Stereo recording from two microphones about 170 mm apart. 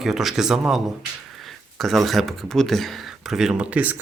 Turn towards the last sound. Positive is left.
turn(degrees=-10)  # may be behind; listen again after turning